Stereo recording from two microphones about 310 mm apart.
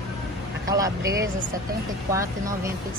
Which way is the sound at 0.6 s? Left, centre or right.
Centre.